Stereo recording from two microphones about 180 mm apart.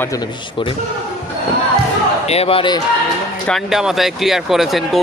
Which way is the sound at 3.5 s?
Centre (ahead or behind).